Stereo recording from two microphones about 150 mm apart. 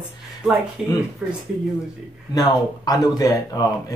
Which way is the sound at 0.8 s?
Centre (ahead or behind).